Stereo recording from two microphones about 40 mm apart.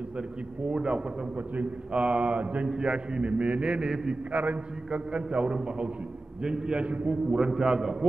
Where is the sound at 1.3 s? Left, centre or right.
Right.